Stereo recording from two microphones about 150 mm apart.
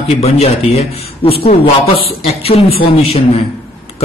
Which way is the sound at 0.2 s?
45° left (ahead or behind).